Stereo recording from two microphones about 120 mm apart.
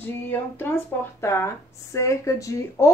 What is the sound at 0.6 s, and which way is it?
A woman's voice, 15° left (ahead or behind).